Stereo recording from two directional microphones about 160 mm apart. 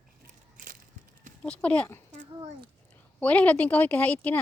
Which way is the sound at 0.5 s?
55° right (ahead or behind).